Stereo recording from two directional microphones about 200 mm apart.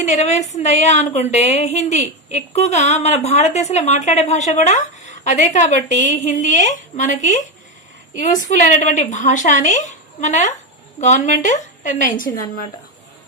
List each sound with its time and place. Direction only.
0.1 s a woman's voice: 35° left (ahead or behind)